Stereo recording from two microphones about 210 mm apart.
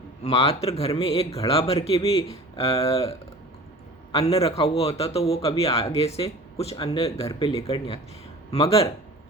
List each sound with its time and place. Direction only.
0.2 s speech: 30° left (ahead or behind)
4.1 s speech: 30° left (ahead or behind)
6.8 s speech: 20° left (ahead or behind)